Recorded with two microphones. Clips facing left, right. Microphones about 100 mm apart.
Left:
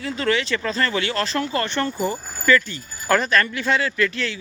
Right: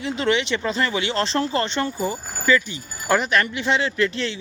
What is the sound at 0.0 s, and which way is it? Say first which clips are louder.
Speech: right 1 dB; 20° right (ahead or behind).